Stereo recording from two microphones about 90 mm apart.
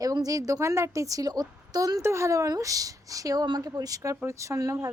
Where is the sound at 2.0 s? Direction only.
30° right (ahead or behind).